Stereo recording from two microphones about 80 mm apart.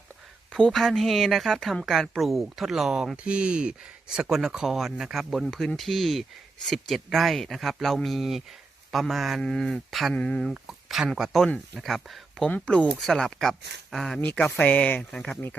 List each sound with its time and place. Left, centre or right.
0.5 s a woman's voice: centre
10.5 s a woman's voice: centre
12.5 s speech: centre
14.2 s speech: left
15.1 s speech: centre